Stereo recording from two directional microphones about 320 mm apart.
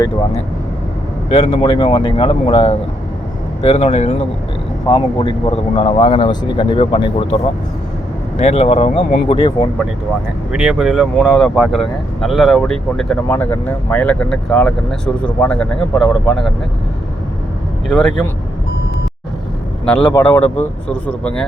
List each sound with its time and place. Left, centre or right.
1.3 s speech: centre
8.4 s speech: centre
10.5 s speech: centre
17.8 s speech: centre
19.8 s speech: centre